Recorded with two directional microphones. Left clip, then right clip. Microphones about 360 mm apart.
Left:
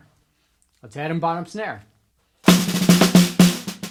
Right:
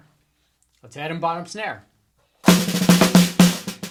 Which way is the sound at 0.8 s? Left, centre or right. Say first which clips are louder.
Left 1 dB; left.